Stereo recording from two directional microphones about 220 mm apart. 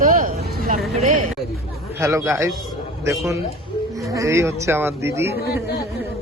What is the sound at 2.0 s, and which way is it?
Speech, 10° right (ahead or behind).